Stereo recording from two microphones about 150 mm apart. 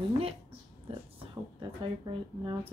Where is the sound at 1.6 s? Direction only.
30° right (ahead or behind).